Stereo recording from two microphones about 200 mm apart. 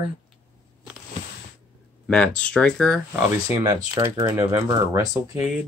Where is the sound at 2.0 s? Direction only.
5° left (ahead or behind).